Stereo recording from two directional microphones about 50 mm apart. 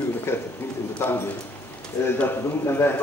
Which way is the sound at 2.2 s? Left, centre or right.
Left.